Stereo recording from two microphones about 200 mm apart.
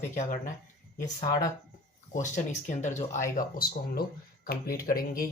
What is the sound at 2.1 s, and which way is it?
Speech, 40° left (ahead or behind).